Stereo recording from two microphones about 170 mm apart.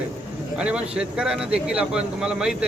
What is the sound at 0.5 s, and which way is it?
Speech, 5° right (ahead or behind).